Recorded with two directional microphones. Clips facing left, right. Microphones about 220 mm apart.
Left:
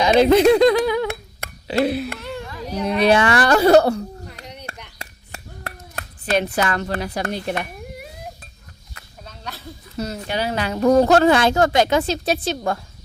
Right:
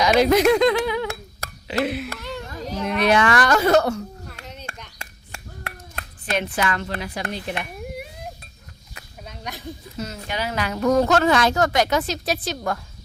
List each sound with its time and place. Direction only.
0.0 s speech: 30° left (ahead or behind)
1.6 s music: 35° left (ahead or behind)
3.0 s a woman's voice: 30° left (ahead or behind)
4.9 s a sound: 40° left (ahead or behind)
6.3 s a woman's voice: 40° left (ahead or behind)
9.0 s a sound: 15° right (ahead or behind)
10.0 s speech: 35° left (ahead or behind)